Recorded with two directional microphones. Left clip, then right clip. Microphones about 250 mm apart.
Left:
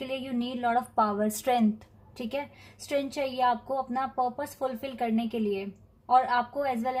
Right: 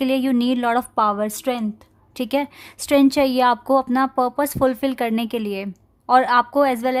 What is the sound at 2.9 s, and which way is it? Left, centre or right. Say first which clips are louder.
A woman's voice: right 13 dB; right.